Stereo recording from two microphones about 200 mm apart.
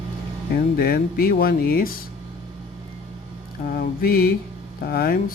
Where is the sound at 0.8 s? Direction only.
45° left (ahead or behind).